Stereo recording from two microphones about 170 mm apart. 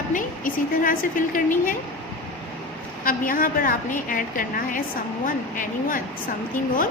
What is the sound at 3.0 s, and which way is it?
A woman's voice, 55° left (ahead or behind).